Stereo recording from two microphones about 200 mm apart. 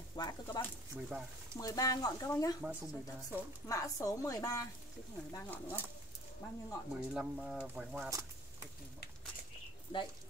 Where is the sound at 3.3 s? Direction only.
15° left (ahead or behind).